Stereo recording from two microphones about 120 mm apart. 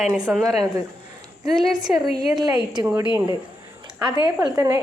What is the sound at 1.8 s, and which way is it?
Speech, 35° right (ahead or behind).